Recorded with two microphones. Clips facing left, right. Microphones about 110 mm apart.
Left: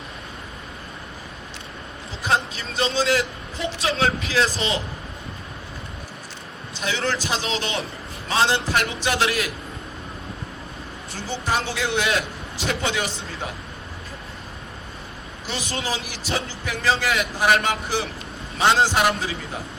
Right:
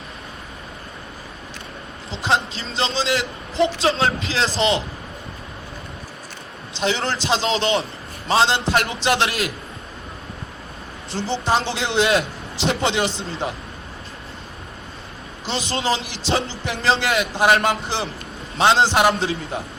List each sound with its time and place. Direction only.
2.2 s a man's voice: 25° right (ahead or behind)
6.7 s a man's voice: 25° right (ahead or behind)
11.3 s a man's voice: 30° right (ahead or behind)
15.4 s a man's voice: 25° right (ahead or behind)